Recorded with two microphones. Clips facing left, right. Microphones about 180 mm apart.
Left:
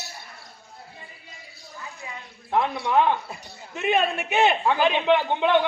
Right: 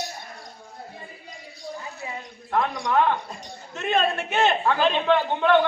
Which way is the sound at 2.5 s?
10° left (ahead or behind).